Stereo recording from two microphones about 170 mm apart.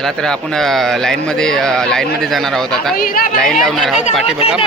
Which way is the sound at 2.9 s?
55° left (ahead or behind).